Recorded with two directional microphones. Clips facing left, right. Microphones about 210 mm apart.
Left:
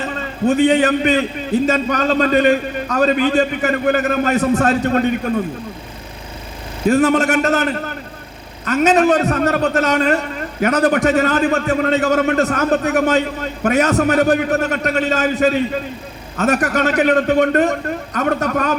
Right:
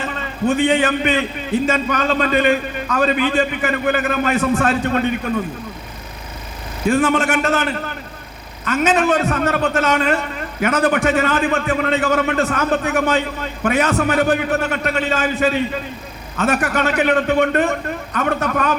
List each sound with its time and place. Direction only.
0.0 s a man's voice: 40° left (ahead or behind)
6.8 s a man's voice: 40° left (ahead or behind)